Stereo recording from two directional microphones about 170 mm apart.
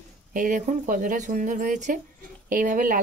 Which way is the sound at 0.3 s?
50° right (ahead or behind).